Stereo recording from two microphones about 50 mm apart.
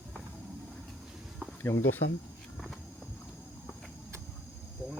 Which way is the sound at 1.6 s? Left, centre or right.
Left.